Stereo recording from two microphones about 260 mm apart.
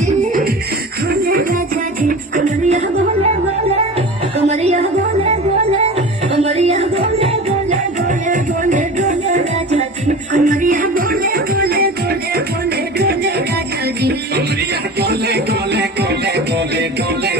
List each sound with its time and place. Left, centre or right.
1.2 s music: right
4.5 s music: right
8.3 s music: right
15.0 s music: right